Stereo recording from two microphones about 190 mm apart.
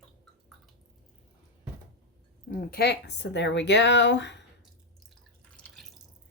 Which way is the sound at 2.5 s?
50° left (ahead or behind).